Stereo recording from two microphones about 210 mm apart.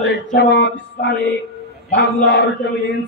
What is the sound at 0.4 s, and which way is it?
Mantra, 50° left (ahead or behind).